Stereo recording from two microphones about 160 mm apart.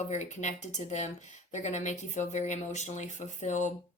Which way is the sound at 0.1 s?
45° left (ahead or behind).